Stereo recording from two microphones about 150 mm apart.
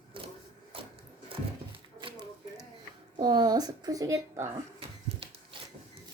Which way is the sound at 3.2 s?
30° right (ahead or behind).